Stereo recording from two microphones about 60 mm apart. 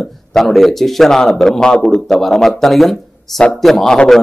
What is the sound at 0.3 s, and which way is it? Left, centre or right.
A man's voice, centre.